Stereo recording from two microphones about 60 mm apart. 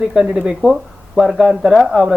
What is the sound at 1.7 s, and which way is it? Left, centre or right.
Speech, centre.